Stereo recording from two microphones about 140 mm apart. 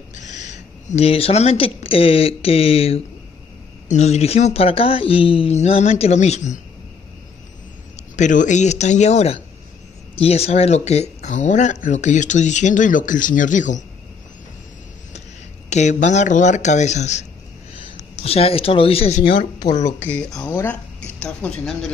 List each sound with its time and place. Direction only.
0.1 s speech: 60° left (ahead or behind)
7.9 s a man's voice: 60° left (ahead or behind)
15.7 s speech: 60° left (ahead or behind)
18.2 s speech: 45° left (ahead or behind)
19.8 s speech: 25° left (ahead or behind)
20.1 s speech: 5° left (ahead or behind)